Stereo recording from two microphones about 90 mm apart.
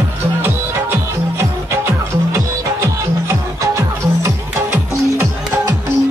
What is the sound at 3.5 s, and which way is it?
Music, 35° right (ahead or behind).